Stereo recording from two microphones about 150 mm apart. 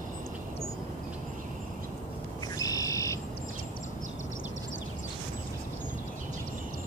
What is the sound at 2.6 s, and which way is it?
Bird, 25° left (ahead or behind).